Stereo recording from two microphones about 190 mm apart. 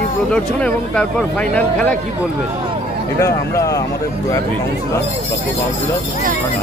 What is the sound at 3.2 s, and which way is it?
Speech, 15° left (ahead or behind).